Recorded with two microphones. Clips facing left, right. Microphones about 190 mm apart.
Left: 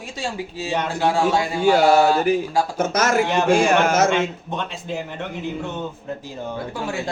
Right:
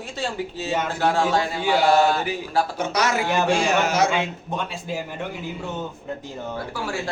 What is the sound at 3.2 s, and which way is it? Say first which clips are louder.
Speech: left 3 dB; 5° right (ahead or behind).